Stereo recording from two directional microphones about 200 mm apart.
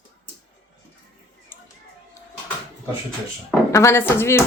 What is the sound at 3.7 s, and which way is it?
Speech, 15° left (ahead or behind).